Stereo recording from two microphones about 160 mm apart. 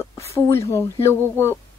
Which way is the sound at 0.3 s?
15° left (ahead or behind).